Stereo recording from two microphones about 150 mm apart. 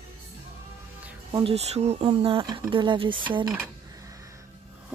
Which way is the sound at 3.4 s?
10° right (ahead or behind).